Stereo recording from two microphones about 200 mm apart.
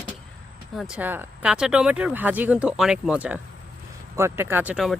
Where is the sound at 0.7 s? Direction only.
Centre (ahead or behind).